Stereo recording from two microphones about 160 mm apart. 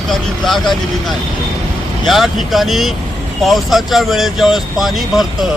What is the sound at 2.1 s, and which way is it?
Speech, centre (ahead or behind).